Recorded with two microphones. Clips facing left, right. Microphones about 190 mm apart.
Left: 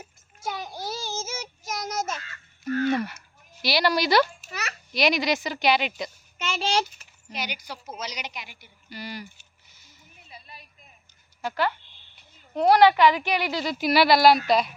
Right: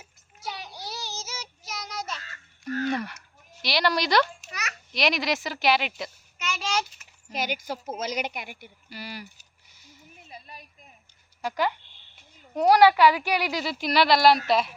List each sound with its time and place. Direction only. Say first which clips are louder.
0.0 s child singing: left 4 dB; 50° left (ahead or behind)
2.8 s a sound: left 3 dB; 5° left (ahead or behind)
3.6 s speech: left 2 dB; 5° left (ahead or behind)
6.4 s a sound: left 4 dB; 30° left (ahead or behind)
7.3 s a woman's voice: right 5 dB; 45° right (ahead or behind)
8.9 s speech: left 2 dB; 5° right (ahead or behind)
10.2 s a sound: right 2 dB; 40° right (ahead or behind)
11.4 s speech: even; 15° right (ahead or behind)
13.7 s speech: left 3 dB; 5° left (ahead or behind)